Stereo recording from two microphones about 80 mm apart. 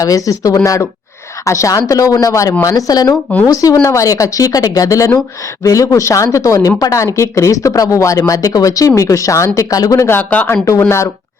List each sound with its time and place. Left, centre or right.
0.0 s speech: left
10.1 s speech: left
10.8 s speech: left